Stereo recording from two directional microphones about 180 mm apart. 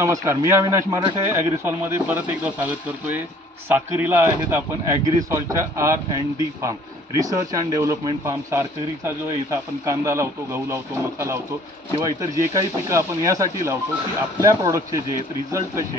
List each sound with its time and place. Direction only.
0.0 s speech: 15° right (ahead or behind)
3.6 s speech: 10° right (ahead or behind)
7.2 s speech: 20° right (ahead or behind)